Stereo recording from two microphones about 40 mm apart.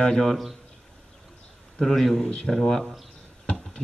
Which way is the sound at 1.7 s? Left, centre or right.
Centre.